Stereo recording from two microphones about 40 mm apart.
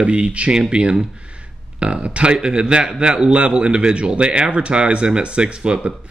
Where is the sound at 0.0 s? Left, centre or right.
Right.